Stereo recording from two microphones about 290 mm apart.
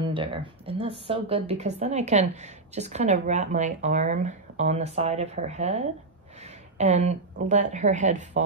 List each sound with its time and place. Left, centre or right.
0.0 s speech: centre
6.4 s a sound: right
7.4 s speech: right